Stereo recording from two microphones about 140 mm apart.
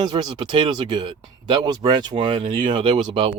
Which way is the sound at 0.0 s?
30° right (ahead or behind).